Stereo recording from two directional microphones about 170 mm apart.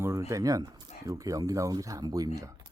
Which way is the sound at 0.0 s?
15° right (ahead or behind).